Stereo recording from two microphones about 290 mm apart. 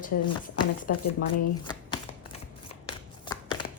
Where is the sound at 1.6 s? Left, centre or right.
Centre.